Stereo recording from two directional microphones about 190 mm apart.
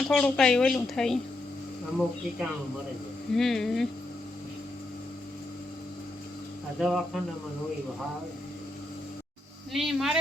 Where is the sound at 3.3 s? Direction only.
Centre (ahead or behind).